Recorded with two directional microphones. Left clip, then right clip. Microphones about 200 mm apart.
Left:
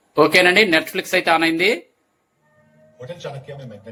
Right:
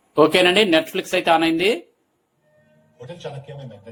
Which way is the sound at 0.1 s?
5° right (ahead or behind).